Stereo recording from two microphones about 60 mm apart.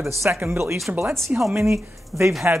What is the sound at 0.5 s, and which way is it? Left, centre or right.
Speech, right.